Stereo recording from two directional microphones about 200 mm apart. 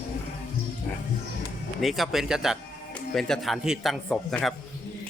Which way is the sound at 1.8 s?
Centre (ahead or behind).